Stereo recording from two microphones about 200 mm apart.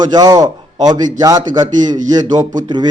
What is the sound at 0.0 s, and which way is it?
Speech, 20° right (ahead or behind).